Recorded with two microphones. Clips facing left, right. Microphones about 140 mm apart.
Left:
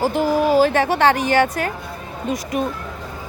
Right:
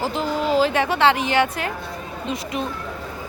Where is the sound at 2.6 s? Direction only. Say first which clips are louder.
Left 5 dB; 50° left (ahead or behind).